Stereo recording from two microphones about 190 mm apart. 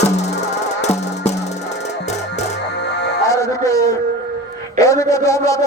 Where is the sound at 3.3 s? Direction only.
15° left (ahead or behind).